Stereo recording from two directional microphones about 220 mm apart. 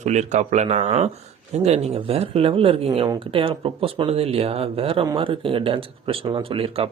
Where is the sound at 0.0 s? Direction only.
30° right (ahead or behind).